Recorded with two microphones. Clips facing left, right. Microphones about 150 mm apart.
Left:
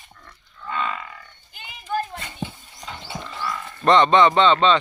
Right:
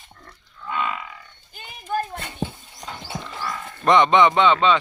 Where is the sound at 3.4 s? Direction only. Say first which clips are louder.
Left 1 dB; 15° right (ahead or behind).